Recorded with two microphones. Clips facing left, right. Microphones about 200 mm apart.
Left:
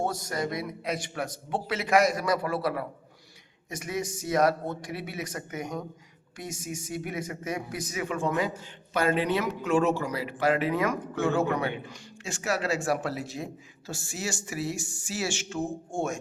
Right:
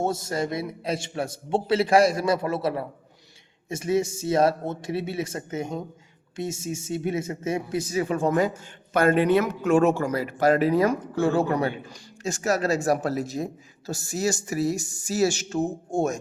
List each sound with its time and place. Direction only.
0.0 s a man's voice: 25° right (ahead or behind)